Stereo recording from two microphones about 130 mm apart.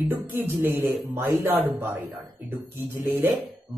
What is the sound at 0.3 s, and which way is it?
Speech, 15° right (ahead or behind).